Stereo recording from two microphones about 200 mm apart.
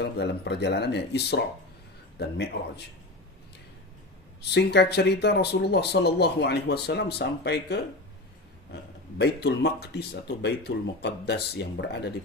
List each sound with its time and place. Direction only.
0.0 s speech: 60° left (ahead or behind)
4.4 s speech: 55° left (ahead or behind)
9.2 s speech: 55° left (ahead or behind)